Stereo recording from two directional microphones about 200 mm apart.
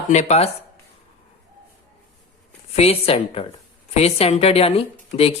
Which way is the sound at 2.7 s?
30° left (ahead or behind).